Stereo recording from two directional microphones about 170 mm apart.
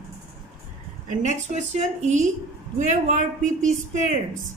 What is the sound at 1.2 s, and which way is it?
A woman's voice, 45° right (ahead or behind).